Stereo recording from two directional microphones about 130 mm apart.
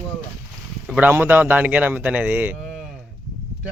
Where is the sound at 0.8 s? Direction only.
15° right (ahead or behind).